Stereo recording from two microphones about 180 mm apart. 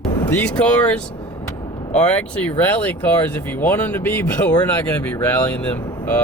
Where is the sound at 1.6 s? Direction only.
25° left (ahead or behind).